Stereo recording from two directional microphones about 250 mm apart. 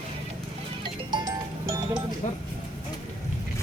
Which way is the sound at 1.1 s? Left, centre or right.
Centre.